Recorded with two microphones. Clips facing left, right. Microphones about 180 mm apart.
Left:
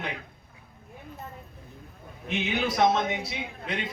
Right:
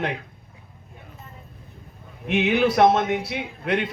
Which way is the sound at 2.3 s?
65° right (ahead or behind).